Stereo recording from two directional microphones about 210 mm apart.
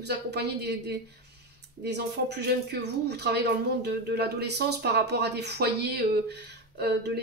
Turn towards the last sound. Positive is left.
turn(degrees=-50)  # may be behind; listen again after turning